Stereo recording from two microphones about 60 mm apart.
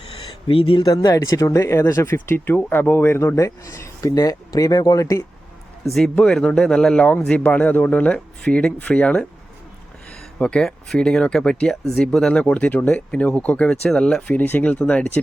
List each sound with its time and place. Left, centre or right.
0.9 s speech: left
1.5 s speech: left
2.2 s speech: left
3.3 s speech: left
6.0 s speech: centre
10.3 s speech: centre
12.3 s speech: left
14.2 s speech: left
14.4 s speech: left
14.7 s speech: left